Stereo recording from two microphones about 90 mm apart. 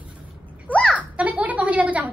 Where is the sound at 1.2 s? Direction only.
15° right (ahead or behind).